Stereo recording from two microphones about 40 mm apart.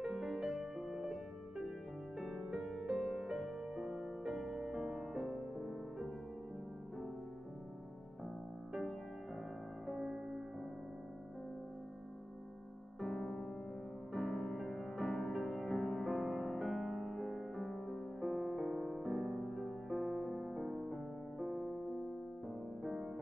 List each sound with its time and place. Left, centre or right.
0.0 s music: centre
2.1 s music: centre
2.4 s music: centre
9.8 s music: centre
13.0 s music: centre